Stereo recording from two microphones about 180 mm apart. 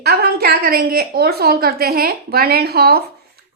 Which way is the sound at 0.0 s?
60° right (ahead or behind).